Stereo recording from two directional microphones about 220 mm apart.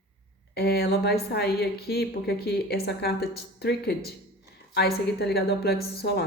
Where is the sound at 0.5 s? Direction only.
45° left (ahead or behind).